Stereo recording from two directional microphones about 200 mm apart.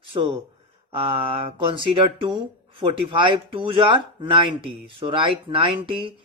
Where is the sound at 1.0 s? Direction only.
25° right (ahead or behind).